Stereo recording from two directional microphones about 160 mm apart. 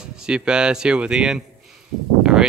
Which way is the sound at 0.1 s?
5° right (ahead or behind).